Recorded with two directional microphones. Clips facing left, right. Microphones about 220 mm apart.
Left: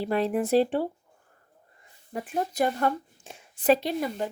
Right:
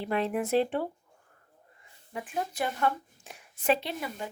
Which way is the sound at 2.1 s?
40° left (ahead or behind).